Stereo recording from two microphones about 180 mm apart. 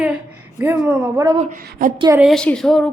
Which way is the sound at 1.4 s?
45° right (ahead or behind).